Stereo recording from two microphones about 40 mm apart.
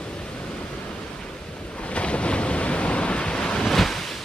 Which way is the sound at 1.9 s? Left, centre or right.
Left.